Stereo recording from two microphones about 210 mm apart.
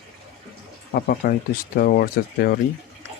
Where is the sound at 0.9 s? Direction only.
45° left (ahead or behind).